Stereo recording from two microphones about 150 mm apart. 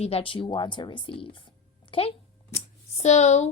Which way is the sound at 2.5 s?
50° left (ahead or behind).